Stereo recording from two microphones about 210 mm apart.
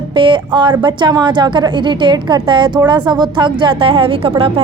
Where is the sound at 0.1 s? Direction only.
25° right (ahead or behind).